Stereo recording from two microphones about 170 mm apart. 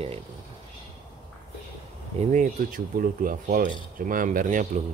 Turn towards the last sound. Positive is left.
turn(degrees=-50)  # may be behind; listen again after turning